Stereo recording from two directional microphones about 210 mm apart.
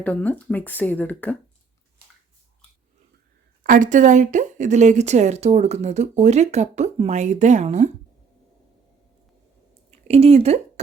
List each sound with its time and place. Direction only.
0.0 s speech: 5° left (ahead or behind)
3.6 s a woman's voice: 40° right (ahead or behind)
9.9 s speech: 30° right (ahead or behind)